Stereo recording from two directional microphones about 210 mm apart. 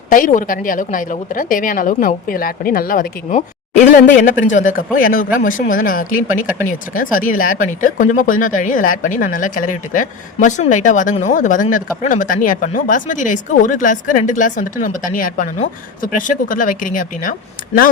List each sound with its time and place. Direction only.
0.1 s speech: 40° left (ahead or behind)